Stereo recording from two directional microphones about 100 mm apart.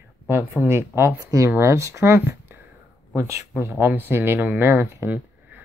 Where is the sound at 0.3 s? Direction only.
20° right (ahead or behind).